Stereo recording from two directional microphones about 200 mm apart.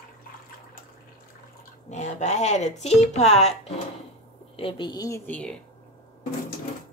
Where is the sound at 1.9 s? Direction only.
35° left (ahead or behind); by 5.6 s 5° left (ahead or behind).